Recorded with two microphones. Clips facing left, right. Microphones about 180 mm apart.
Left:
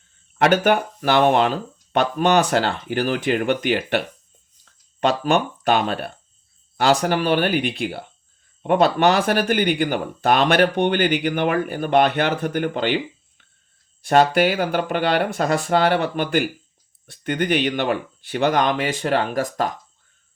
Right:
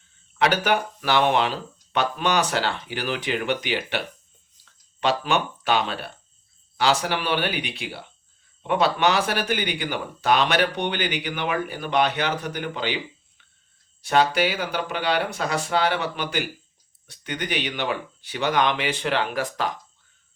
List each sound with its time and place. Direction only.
0.3 s speech: 50° left (ahead or behind)
14.0 s speech: 45° left (ahead or behind)